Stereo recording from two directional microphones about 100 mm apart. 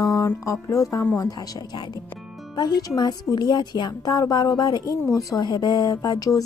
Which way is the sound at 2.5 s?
45° left (ahead or behind).